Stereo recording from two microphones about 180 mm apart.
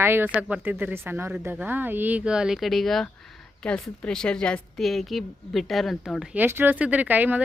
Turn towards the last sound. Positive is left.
turn(degrees=-10)  # may be behind; listen again after turning